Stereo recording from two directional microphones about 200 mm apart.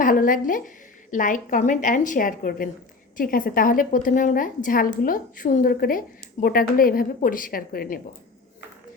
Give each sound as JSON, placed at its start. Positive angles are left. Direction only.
{"t": 0.0, "sound": "a woman's voice", "side_deg": 45}